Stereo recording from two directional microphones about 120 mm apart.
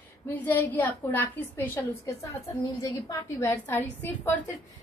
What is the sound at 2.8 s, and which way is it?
Speech, 30° left (ahead or behind).